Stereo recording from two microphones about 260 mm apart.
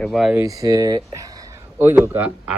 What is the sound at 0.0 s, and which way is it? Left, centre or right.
Speech, centre.